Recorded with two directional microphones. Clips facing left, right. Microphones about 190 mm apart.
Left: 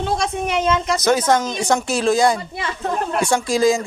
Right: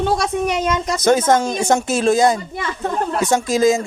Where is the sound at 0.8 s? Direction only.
50° right (ahead or behind).